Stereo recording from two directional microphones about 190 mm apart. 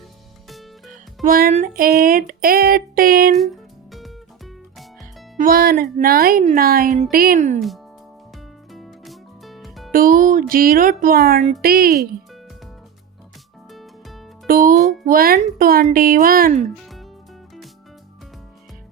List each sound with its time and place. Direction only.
0.9 s music: 45° right (ahead or behind)
3.4 s music: centre (ahead or behind)
5.4 s music: 50° right (ahead or behind)
8.7 s music: centre (ahead or behind)
9.9 s music: 45° right (ahead or behind)
14.4 s speech: 45° right (ahead or behind)
15.0 s music: 50° right (ahead or behind)